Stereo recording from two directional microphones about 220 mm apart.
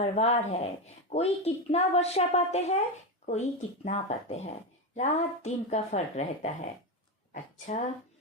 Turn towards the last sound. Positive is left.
turn(degrees=35)  # may be behind; listen again after turning